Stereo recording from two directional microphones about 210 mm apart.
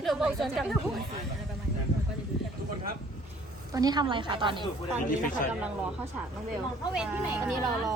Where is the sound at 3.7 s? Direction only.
20° right (ahead or behind).